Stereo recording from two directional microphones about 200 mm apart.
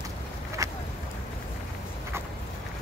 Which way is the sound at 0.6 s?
15° right (ahead or behind).